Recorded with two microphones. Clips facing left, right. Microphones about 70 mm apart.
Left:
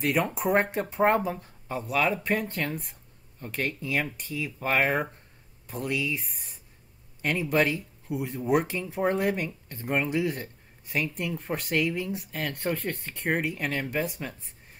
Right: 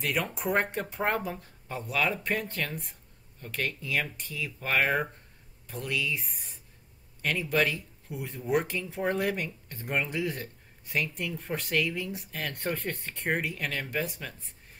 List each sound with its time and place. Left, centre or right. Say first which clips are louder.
0.0 s speech: left 5 dB; left
6.2 s speech: even; centre
7.2 s speech: left 3 dB; centre
12.5 s speech: left 2 dB; centre
13.4 s speech: left 3 dB; centre